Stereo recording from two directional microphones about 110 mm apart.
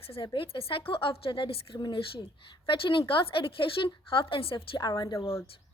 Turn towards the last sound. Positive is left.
turn(degrees=25)  # may be behind; listen again after turning